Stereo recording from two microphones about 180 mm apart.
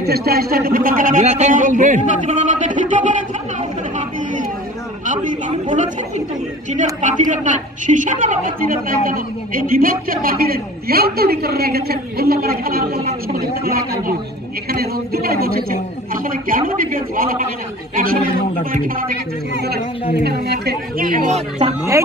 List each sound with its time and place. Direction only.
0.0 s a woman's voice: 60° right (ahead or behind); by 3.1 s 45° right (ahead or behind)
3.9 s chatter: 45° right (ahead or behind)
5.0 s a woman's voice: 45° right (ahead or behind)
20.2 s a woman's voice: 65° right (ahead or behind); by 21.7 s 35° right (ahead or behind)